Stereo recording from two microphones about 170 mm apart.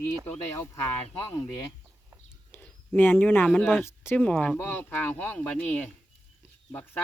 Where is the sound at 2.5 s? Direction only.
10° left (ahead or behind).